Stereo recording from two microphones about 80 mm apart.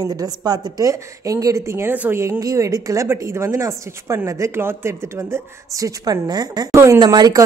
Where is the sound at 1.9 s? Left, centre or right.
Right.